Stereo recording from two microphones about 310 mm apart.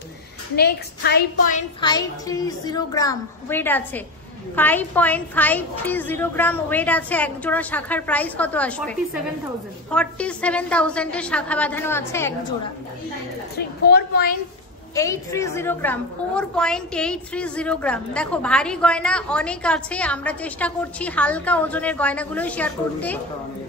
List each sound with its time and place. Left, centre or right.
0.6 s a woman's voice: left
1.8 s a woman's voice: centre
13.6 s a woman's voice: left
15.0 s a woman's voice: centre